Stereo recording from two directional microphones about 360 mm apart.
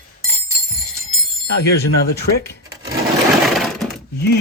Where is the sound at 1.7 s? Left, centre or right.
Left.